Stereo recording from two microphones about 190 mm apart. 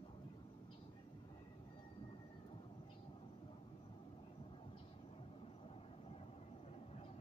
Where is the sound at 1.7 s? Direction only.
25° left (ahead or behind).